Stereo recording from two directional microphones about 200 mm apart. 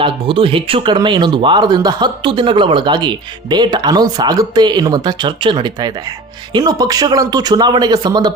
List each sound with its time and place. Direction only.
0.0 s speech: 25° right (ahead or behind)